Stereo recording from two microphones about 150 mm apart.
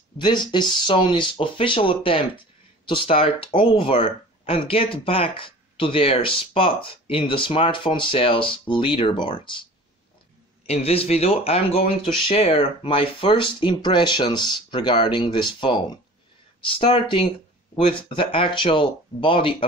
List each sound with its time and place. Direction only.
0.2 s speech: 30° left (ahead or behind)
10.7 s speech: 40° left (ahead or behind)